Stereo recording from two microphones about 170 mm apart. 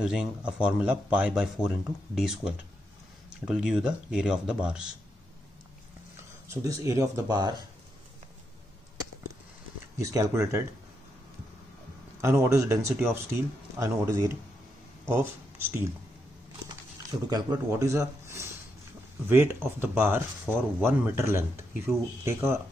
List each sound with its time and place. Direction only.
0.0 s speech: 5° right (ahead or behind)
6.5 s speech: 20° right (ahead or behind)
9.9 s speech: 20° right (ahead or behind)
12.2 s speech: 15° right (ahead or behind)
17.3 s speech: 20° right (ahead or behind)